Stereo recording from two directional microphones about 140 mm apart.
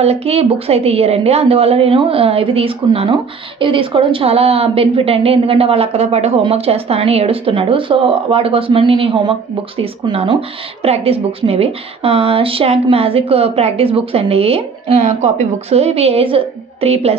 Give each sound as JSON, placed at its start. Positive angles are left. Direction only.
{"t": 0.0, "sound": "a woman's voice", "side_deg": -45}